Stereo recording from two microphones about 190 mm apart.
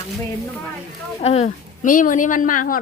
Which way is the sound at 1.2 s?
35° left (ahead or behind).